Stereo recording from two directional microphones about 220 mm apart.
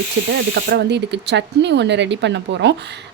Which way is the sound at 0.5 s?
50° right (ahead or behind).